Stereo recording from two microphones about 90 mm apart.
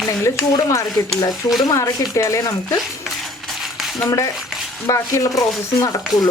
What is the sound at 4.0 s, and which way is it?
Speech, 35° left (ahead or behind).